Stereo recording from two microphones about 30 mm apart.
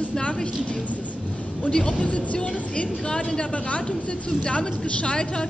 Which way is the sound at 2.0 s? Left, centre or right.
Left.